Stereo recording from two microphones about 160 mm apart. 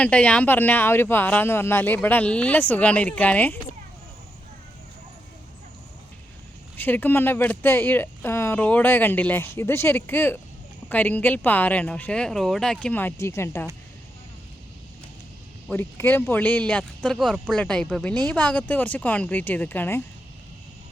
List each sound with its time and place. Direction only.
0.0 s speech: 10° left (ahead or behind)
6.7 s speech: 10° left (ahead or behind)
15.7 s speech: 15° left (ahead or behind)